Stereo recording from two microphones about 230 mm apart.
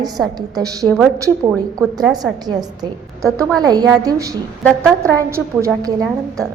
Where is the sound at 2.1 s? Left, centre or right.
Centre.